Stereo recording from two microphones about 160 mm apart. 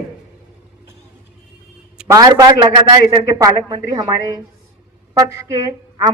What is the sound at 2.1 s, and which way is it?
A man's voice, 20° right (ahead or behind).